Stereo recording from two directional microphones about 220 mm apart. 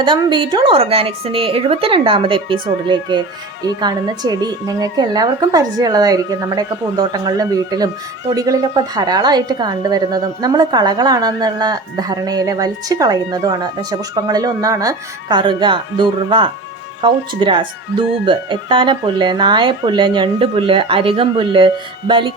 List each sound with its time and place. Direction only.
0.0 s a woman's voice: 20° right (ahead or behind)